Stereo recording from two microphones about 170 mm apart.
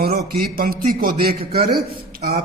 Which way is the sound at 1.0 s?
60° right (ahead or behind).